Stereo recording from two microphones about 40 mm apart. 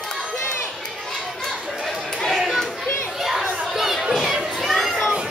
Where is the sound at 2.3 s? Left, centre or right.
Centre.